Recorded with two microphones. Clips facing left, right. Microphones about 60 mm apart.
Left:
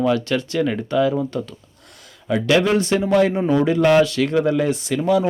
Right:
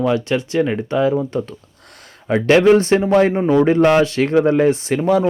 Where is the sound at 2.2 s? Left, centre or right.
Right.